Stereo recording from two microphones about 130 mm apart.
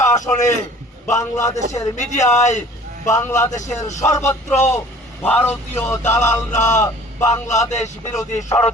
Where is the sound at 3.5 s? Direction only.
65° left (ahead or behind).